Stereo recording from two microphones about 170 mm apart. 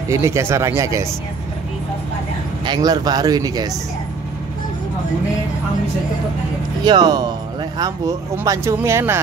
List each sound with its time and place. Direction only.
0.1 s speech: 15° right (ahead or behind)
2.6 s speech: 25° right (ahead or behind)
6.8 s speech: 25° right (ahead or behind)